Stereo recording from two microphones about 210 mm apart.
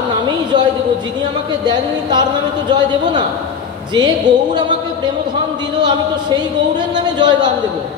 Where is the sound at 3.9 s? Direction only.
20° right (ahead or behind).